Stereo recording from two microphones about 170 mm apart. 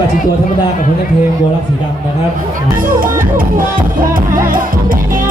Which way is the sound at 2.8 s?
55° right (ahead or behind).